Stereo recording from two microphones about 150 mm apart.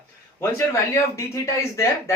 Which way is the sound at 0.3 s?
20° left (ahead or behind).